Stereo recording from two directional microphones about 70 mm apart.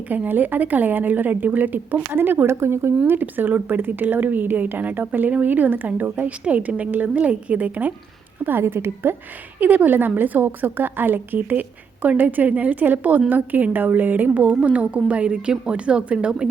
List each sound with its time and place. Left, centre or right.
0.1 s a woman's voice: right
3.1 s a woman's voice: right
8.4 s a woman's voice: right; by 16.5 s centre